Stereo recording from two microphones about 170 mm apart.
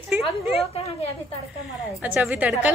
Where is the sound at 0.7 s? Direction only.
35° left (ahead or behind).